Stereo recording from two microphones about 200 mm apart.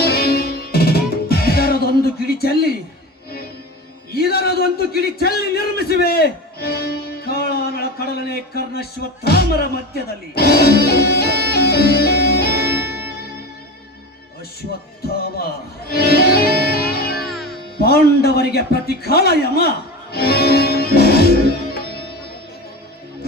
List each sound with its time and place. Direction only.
0.0 s music: 50° left (ahead or behind)
4.1 s a sound: 50° left (ahead or behind)
15.9 s music: 50° left (ahead or behind)
17.3 s music: centre (ahead or behind)
17.7 s a man's voice: 50° left (ahead or behind)
20.1 s music: 50° left (ahead or behind)